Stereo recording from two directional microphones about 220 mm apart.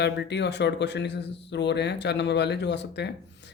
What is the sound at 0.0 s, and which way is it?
Speech, 50° left (ahead or behind).